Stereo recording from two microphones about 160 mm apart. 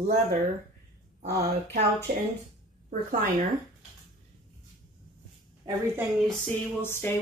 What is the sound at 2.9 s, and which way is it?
Speech, 55° right (ahead or behind).